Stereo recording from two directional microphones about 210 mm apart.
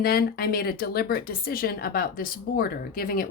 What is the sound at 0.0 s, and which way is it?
Speech, 45° left (ahead or behind).